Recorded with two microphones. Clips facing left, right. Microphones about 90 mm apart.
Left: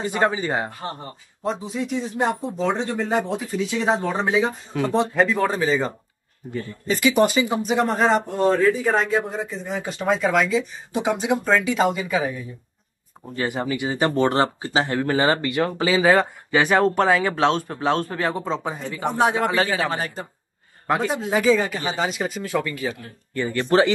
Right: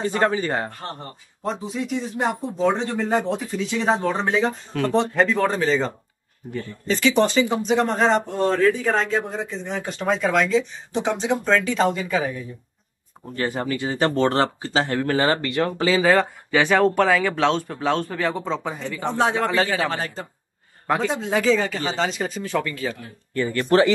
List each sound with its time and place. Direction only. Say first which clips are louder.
0.0 s speech: right 1 dB; 15° left (ahead or behind)